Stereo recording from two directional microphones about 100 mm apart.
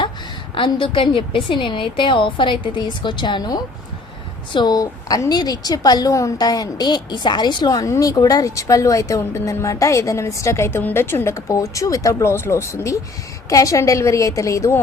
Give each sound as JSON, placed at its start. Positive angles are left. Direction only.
{"t": 0.5, "sound": "a woman's voice", "side_deg": 60}